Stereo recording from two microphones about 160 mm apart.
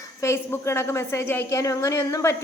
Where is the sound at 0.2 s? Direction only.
15° left (ahead or behind).